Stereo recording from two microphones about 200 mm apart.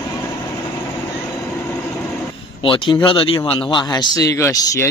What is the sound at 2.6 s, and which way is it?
Speech, 25° left (ahead or behind).